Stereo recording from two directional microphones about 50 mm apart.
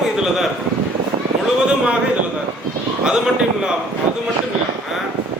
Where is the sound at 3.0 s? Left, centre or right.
Centre.